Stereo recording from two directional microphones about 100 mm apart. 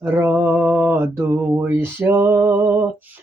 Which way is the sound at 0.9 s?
30° right (ahead or behind).